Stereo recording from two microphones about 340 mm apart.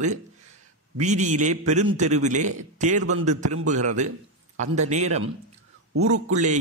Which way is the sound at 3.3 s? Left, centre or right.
Right.